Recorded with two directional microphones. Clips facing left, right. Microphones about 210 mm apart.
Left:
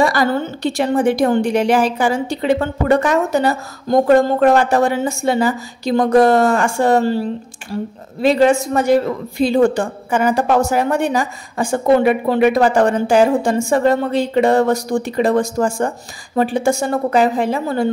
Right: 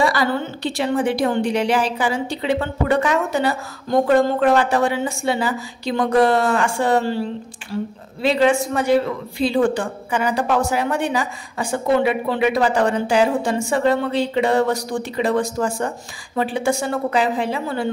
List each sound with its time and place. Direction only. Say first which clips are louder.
0.0 s a woman's voice: left 3 dB; 45° left (ahead or behind)
8.2 s a woman's voice: left 4 dB; 45° left (ahead or behind)